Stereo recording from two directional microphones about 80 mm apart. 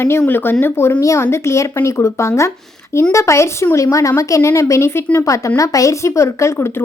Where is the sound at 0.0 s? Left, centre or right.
Left.